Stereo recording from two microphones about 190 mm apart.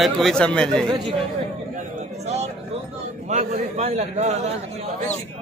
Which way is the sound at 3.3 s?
40° right (ahead or behind).